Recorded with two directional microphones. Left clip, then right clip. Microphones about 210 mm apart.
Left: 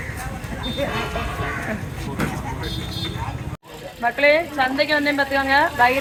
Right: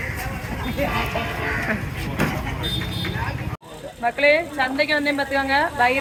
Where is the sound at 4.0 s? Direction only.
10° left (ahead or behind).